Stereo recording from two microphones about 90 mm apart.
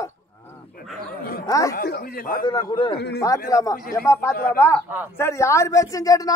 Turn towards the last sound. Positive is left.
turn(degrees=40)  # may be behind; listen again after turning